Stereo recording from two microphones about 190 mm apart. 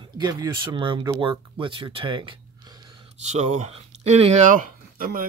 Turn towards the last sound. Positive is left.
turn(degrees=-45)  # may be behind; listen again after turning